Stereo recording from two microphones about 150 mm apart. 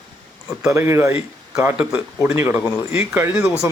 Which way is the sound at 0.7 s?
20° right (ahead or behind).